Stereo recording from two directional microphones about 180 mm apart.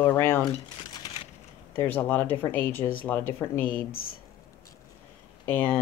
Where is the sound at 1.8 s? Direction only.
10° left (ahead or behind).